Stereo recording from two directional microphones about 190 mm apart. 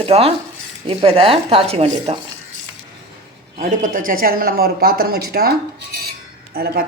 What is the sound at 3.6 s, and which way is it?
Speech, 45° right (ahead or behind).